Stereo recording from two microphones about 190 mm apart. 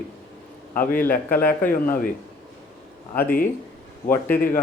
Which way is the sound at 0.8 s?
45° left (ahead or behind).